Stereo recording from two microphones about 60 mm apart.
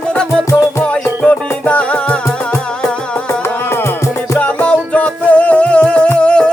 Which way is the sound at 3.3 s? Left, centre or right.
Left.